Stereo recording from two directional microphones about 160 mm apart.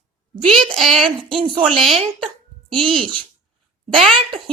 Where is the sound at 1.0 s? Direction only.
35° right (ahead or behind).